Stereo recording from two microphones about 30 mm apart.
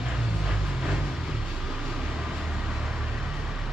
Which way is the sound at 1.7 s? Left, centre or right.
Centre.